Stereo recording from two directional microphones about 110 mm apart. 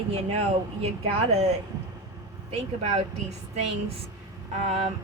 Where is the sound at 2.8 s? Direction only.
90° right.